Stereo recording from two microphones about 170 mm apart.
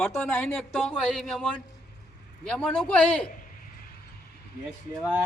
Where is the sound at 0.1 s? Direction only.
10° left (ahead or behind).